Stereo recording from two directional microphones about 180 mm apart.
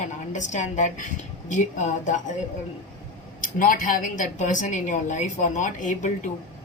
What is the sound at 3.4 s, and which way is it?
Speech, 50° left (ahead or behind).